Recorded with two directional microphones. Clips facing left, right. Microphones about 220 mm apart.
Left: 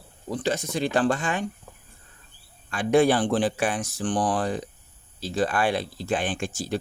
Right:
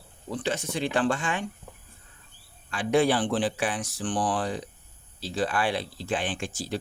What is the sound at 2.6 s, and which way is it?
Speech, 45° left (ahead or behind).